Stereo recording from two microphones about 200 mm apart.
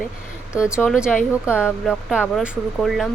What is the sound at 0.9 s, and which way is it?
Speech, 5° right (ahead or behind).